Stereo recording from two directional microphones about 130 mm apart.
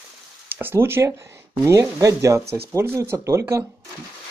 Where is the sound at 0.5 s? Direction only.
15° right (ahead or behind).